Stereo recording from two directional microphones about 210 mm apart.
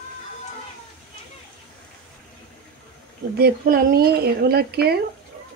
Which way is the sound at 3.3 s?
45° right (ahead or behind).